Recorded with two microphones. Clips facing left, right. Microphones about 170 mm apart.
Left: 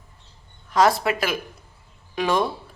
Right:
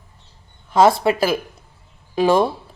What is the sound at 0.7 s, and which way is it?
A man's voice, 25° right (ahead or behind).